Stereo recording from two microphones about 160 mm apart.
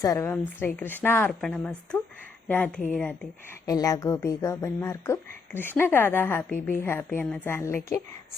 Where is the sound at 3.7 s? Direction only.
20° left (ahead or behind).